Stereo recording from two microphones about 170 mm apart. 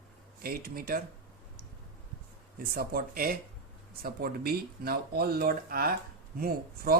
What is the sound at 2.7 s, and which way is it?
Speech, 60° right (ahead or behind).